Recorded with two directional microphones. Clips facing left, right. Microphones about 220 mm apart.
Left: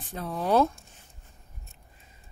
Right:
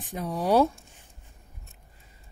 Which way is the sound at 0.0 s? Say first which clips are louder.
Right 2 dB; 15° right (ahead or behind).